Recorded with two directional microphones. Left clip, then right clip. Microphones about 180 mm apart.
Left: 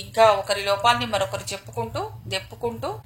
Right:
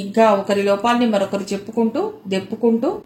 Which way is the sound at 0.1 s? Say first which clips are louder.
Right 3 dB; 30° left (ahead or behind).